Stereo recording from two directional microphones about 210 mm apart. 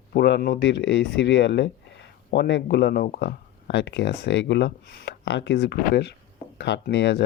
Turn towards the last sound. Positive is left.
turn(degrees=55)  # may be behind; listen again after turning